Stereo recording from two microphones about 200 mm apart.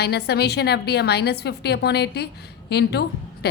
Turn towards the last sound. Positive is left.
turn(degrees=55)  # may be behind; listen again after turning